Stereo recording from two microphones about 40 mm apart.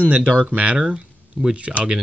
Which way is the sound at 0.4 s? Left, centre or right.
Right.